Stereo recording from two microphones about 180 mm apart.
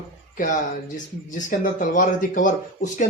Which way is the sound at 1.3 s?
45° left (ahead or behind).